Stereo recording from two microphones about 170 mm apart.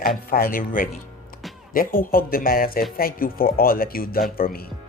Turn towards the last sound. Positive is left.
turn(degrees=60)  # may be behind; listen again after turning